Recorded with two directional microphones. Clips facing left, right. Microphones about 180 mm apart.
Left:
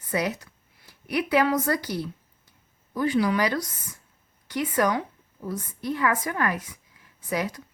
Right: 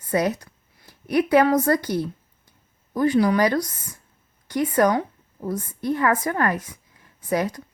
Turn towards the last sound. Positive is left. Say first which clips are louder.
# right 5 dB
turn(degrees=-45)  # may be behind; listen again after turning